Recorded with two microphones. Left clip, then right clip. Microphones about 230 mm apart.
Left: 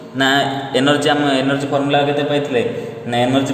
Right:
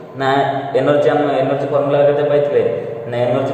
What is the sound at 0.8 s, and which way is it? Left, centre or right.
Speech, left.